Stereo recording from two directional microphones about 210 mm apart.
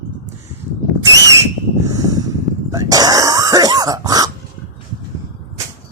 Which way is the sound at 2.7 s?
15° right (ahead or behind).